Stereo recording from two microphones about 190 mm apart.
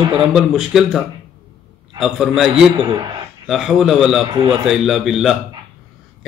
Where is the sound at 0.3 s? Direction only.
5° right (ahead or behind).